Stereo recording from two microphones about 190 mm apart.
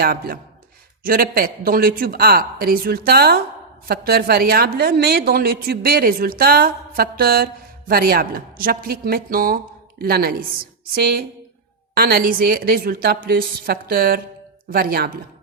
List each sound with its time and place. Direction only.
0.0 s a woman's voice: 50° right (ahead or behind)